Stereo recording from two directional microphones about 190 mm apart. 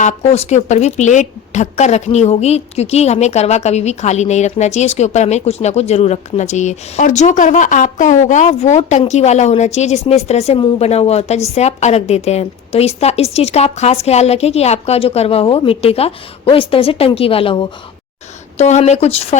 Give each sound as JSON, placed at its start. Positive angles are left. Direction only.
{"t": 0.0, "sound": "a woman's voice", "side_deg": 35}